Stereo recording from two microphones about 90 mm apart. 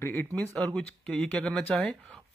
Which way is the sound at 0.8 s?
10° left (ahead or behind).